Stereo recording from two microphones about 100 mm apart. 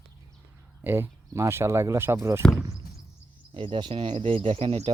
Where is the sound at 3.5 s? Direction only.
65° right (ahead or behind).